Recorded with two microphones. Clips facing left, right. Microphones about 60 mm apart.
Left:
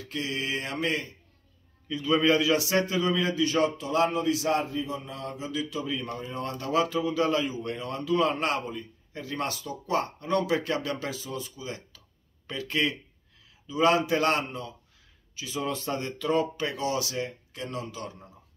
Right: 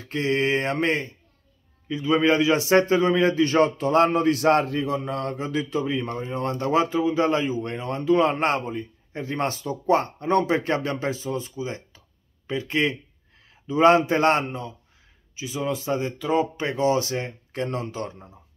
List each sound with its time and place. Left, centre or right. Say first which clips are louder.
0.0 s a man's voice: right 9 dB; right
1.9 s a man's voice: right 3 dB; right
13.7 s a man's voice: right 6 dB; right
15.3 s speech: right 4 dB; centre; by 18.3 s right